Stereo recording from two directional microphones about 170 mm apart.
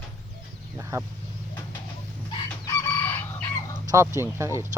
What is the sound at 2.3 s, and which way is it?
Chicken, 15° left (ahead or behind).